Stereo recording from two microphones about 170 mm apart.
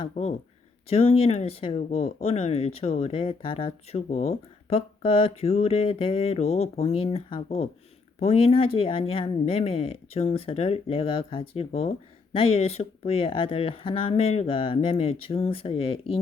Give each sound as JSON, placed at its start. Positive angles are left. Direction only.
{"t": 0.0, "sound": "speech", "side_deg": 40}